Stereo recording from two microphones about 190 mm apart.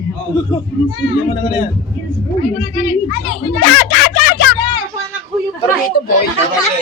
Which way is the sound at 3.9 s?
55° left (ahead or behind).